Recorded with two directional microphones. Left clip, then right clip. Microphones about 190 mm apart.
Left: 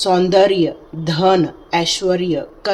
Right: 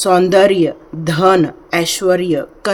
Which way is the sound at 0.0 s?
35° right (ahead or behind).